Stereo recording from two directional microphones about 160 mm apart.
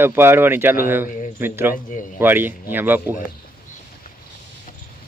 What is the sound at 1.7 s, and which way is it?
Speech, 55° left (ahead or behind).